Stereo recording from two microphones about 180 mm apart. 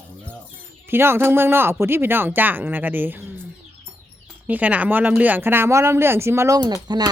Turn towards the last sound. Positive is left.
turn(degrees=-20)  # may be behind; listen again after turning